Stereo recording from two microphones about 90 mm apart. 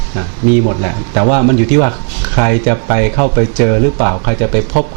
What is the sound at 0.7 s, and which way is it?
Speech, 20° right (ahead or behind).